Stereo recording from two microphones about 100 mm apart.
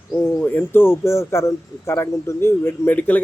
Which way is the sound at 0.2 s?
20° left (ahead or behind).